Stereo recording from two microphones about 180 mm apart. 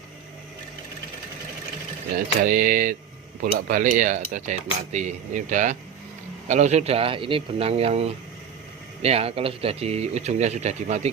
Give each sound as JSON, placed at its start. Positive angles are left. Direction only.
{"t": 2.1, "sound": "speech", "side_deg": -55}